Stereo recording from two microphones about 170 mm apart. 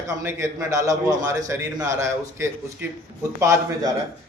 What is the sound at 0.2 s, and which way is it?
A man's voice, 15° right (ahead or behind).